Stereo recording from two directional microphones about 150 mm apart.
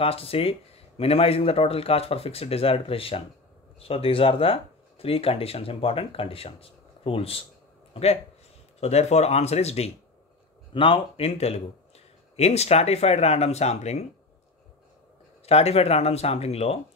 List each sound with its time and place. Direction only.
0.0 s speech: 40° left (ahead or behind)
15.4 s speech: 45° left (ahead or behind)